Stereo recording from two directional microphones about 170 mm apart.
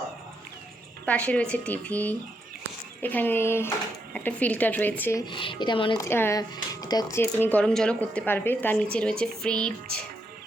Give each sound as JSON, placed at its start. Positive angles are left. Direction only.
{"t": 1.0, "sound": "speech", "side_deg": 5}
{"t": 5.2, "sound": "speech", "side_deg": 30}
{"t": 6.0, "sound": "speech", "side_deg": 15}